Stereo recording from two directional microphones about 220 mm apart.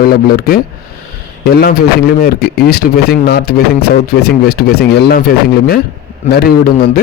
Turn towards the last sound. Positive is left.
turn(degrees=45)  # may be behind; listen again after turning